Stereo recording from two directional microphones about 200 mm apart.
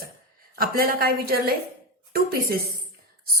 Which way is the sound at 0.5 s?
50° right (ahead or behind).